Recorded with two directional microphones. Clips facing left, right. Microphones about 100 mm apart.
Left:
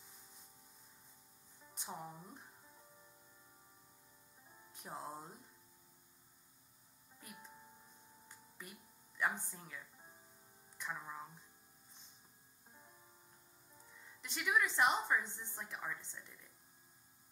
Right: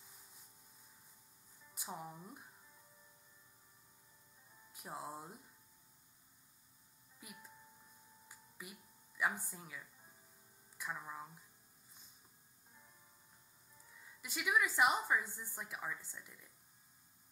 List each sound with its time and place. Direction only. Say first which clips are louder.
1.8 s a woman's voice: even; 5° right (ahead or behind)
4.7 s a woman's voice: right 1 dB; 5° right (ahead or behind)
8.3 s a sound: right 1 dB; 5° right (ahead or behind)
9.4 s a woman's voice: right 1 dB; 5° right (ahead or behind)
14.2 s a woman's voice: even; 5° right (ahead or behind)